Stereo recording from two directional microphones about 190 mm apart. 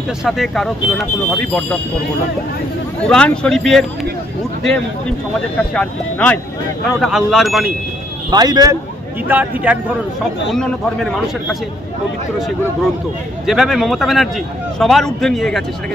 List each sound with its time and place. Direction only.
0.2 s speech: centre (ahead or behind)
3.0 s speech: 5° left (ahead or behind)
5.6 s speech: 5° left (ahead or behind)
8.3 s speech: 20° right (ahead or behind)
9.3 s speech: 10° right (ahead or behind)
10.5 s speech: 5° left (ahead or behind)
13.5 s speech: centre (ahead or behind)